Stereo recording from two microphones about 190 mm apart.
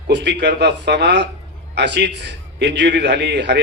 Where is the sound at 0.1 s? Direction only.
65° right (ahead or behind).